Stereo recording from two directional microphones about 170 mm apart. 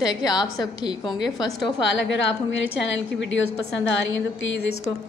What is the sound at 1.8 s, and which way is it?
A woman's voice, 90° left.